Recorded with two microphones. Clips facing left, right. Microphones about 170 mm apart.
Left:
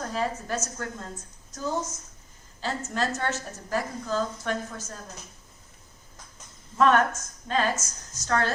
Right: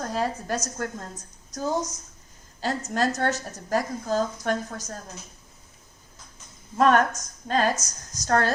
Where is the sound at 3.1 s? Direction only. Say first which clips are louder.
Right 4 dB; 40° right (ahead or behind).